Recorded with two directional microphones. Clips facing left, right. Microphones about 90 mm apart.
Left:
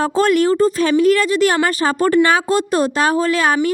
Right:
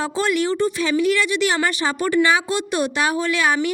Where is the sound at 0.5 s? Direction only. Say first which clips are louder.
Left 6 dB; 35° left (ahead or behind).